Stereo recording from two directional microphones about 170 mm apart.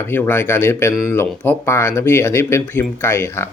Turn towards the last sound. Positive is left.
turn(degrees=15)  # may be behind; listen again after turning